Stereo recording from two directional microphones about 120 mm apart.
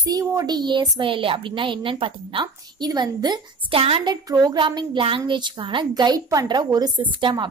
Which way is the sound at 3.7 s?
50° right (ahead or behind).